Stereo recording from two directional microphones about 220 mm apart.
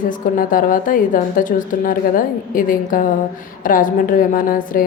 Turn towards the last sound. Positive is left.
turn(degrees=40)  # may be behind; listen again after turning